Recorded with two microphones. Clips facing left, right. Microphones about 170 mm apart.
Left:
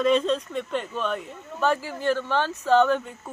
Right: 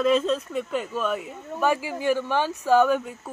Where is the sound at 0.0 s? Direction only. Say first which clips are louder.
Even; 5° right (ahead or behind).